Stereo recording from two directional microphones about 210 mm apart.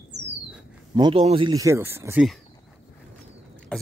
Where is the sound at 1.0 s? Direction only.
25° right (ahead or behind).